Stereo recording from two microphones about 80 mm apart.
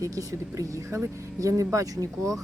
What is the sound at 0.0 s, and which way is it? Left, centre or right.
Speech, right.